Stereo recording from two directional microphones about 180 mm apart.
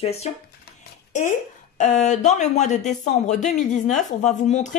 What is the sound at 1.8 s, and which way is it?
A woman's voice, 40° left (ahead or behind).